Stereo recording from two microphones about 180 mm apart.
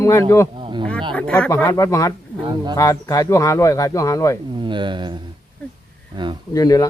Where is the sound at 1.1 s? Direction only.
5° left (ahead or behind).